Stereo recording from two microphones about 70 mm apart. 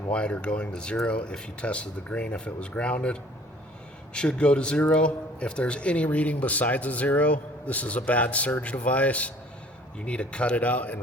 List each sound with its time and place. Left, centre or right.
0.1 s speech: centre